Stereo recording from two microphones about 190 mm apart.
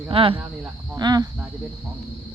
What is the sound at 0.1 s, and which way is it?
A woman's voice, 30° right (ahead or behind).